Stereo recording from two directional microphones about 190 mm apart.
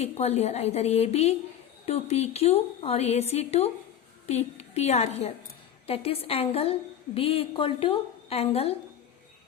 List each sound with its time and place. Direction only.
0.0 s a woman's voice: 35° left (ahead or behind)